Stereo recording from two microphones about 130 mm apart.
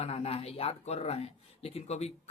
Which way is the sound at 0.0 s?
50° left (ahead or behind).